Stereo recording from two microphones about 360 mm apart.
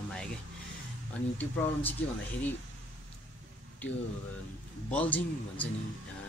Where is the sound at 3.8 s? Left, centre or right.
Centre.